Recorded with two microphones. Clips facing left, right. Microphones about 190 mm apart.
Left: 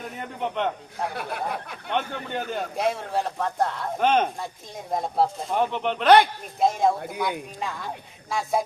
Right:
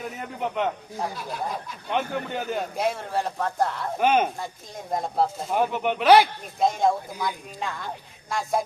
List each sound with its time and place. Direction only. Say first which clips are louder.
0.0 s a man's voice: even; 5° right (ahead or behind)
1.1 s speech: left 1 dB; 60° left (ahead or behind)
1.9 s a man's voice: right 1 dB; 5° right (ahead or behind)